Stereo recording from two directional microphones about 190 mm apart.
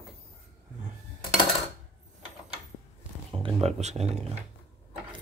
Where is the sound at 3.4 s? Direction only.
30° right (ahead or behind).